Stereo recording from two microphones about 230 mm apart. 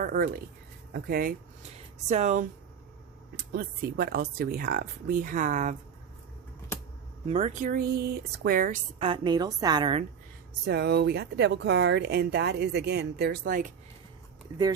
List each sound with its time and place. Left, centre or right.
0.0 s speech: right
7.3 s speech: right
9.0 s a woman's voice: right
10.7 s speech: right